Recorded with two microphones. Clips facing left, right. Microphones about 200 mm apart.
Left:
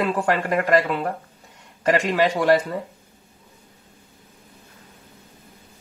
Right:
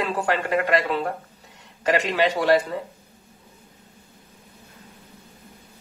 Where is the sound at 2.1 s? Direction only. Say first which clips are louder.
Left 1 dB; 45° left (ahead or behind).